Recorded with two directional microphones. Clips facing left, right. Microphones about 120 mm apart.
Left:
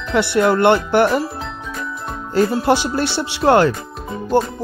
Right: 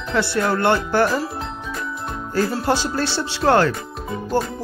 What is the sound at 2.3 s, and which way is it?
Speech, 20° left (ahead or behind).